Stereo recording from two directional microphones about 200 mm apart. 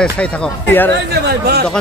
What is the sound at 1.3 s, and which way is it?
Speech, 50° right (ahead or behind).